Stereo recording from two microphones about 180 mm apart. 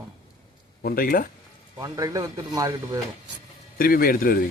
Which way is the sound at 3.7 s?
55° left (ahead or behind).